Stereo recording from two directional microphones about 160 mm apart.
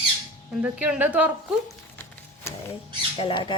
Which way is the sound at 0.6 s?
10° right (ahead or behind).